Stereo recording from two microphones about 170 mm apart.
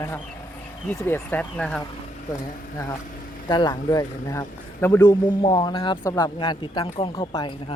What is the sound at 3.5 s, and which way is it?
Speech, 25° left (ahead or behind).